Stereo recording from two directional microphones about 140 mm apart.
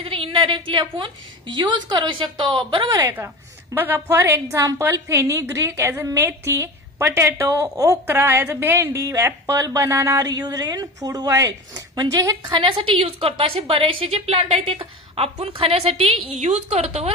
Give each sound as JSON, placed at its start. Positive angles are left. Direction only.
{"t": 0.0, "sound": "a woman's voice", "side_deg": -40}
{"t": 3.7, "sound": "a woman's voice", "side_deg": -15}